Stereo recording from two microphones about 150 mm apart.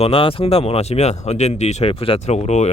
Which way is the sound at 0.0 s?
35° left (ahead or behind).